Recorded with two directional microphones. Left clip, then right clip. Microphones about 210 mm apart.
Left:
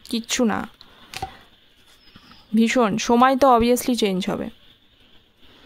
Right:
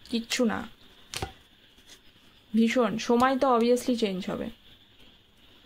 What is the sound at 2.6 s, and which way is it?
Speech, 35° left (ahead or behind).